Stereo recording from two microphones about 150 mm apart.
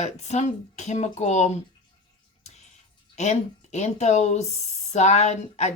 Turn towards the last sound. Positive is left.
turn(degrees=50)  # may be behind; listen again after turning